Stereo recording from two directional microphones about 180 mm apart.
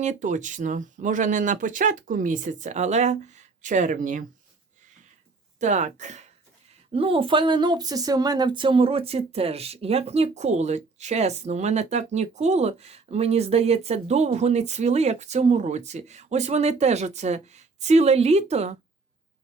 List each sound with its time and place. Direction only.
0.0 s speech: 40° right (ahead or behind)
5.5 s speech: 40° right (ahead or behind)
6.9 s speech: 30° right (ahead or behind)